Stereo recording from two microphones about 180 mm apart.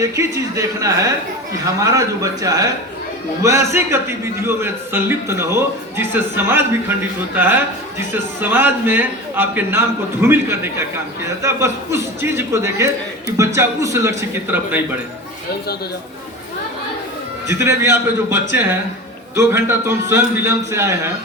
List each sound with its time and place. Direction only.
0.0 s a man's voice: 15° right (ahead or behind)
17.5 s a man's voice: 15° right (ahead or behind)